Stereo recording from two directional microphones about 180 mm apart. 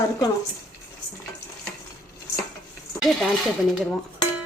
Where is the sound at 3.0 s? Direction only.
Centre (ahead or behind).